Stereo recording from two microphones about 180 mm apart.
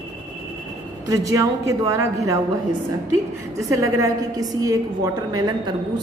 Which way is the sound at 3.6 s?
20° right (ahead or behind).